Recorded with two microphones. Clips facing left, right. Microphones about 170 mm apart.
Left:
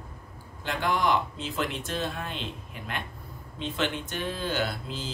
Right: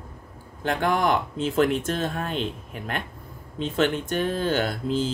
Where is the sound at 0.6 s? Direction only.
50° right (ahead or behind).